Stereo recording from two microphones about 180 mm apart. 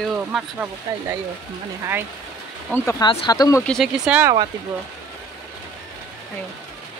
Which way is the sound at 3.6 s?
Centre (ahead or behind).